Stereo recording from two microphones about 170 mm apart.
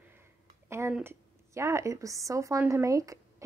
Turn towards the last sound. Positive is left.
turn(degrees=-20)  # may be behind; listen again after turning